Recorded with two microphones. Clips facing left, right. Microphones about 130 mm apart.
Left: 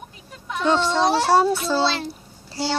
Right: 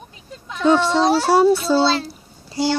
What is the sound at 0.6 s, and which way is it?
Child singing, 10° right (ahead or behind).